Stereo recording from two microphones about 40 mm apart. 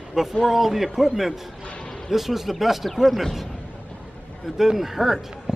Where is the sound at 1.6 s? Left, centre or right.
Left.